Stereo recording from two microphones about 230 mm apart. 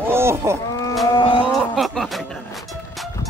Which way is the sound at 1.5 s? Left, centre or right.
Centre.